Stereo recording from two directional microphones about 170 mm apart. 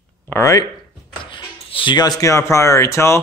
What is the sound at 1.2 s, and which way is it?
Speech, 30° left (ahead or behind).